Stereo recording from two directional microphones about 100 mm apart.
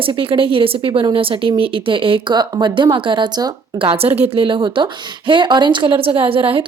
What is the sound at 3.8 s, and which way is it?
Speech, 80° right.